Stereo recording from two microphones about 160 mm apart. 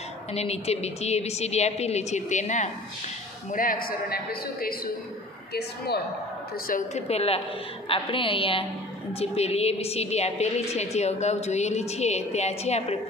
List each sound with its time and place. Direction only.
0.3 s a woman's voice: 40° left (ahead or behind)
3.5 s a woman's voice: 65° left (ahead or behind)
5.5 s a woman's voice: 90° left
6.7 s a woman's voice: 45° left (ahead or behind)